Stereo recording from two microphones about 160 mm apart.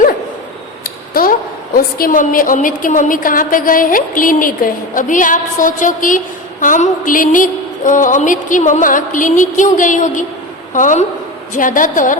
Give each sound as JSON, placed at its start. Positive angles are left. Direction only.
{"t": 0.9, "sound": "a woman's voice", "side_deg": 65}